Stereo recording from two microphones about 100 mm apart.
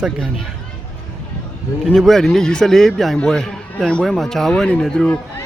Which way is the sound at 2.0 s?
Centre (ahead or behind).